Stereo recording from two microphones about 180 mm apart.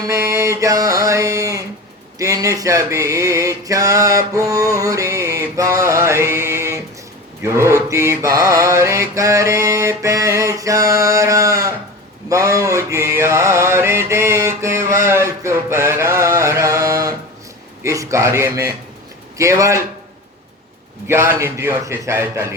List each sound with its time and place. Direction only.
0.0 s mantra: 15° right (ahead or behind)
2.1 s a sound: 20° right (ahead or behind)
7.4 s mantra: 15° right (ahead or behind)
17.8 s a man's voice: 15° right (ahead or behind)
19.4 s mantra: 15° right (ahead or behind)
21.1 s mantra: 15° right (ahead or behind)